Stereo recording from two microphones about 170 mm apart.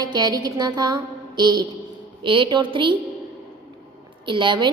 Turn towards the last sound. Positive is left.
turn(degrees=-30)  # may be behind; listen again after turning